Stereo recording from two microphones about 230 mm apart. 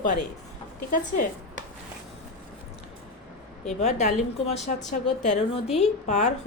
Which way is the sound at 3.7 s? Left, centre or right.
Left.